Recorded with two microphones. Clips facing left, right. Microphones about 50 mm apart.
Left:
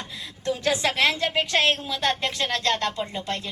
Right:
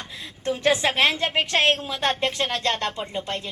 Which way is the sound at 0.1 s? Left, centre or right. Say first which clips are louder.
Right 1 dB; right.